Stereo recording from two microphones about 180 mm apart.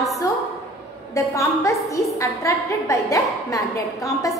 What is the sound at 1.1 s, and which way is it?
A woman's voice, 15° left (ahead or behind).